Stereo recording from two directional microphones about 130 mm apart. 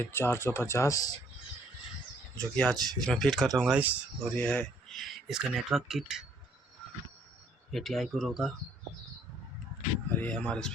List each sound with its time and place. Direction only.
0.0 s speech: 15° left (ahead or behind)
2.6 s speech: 5° left (ahead or behind)
3.6 s speech: 10° right (ahead or behind)
4.2 s speech: 10° left (ahead or behind)
7.7 s speech: centre (ahead or behind)
10.2 s speech: 10° left (ahead or behind)